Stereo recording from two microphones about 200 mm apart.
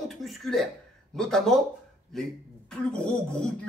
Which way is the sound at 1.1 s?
Centre (ahead or behind).